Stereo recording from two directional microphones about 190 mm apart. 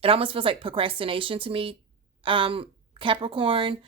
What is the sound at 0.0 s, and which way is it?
Speech, 30° right (ahead or behind).